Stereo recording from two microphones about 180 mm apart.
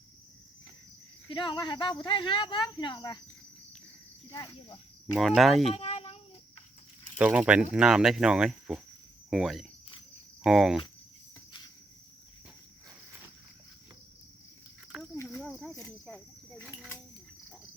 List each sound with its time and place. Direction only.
1.3 s speech: 25° left (ahead or behind)
4.3 s speech: 20° left (ahead or behind)
5.1 s speech: centre (ahead or behind)
5.7 s a sound: 35° left (ahead or behind)
7.2 s speech: 5° right (ahead or behind)
15.1 s cricket: 15° left (ahead or behind)
15.4 s cricket: centre (ahead or behind)
15.8 s speech: 5° left (ahead or behind)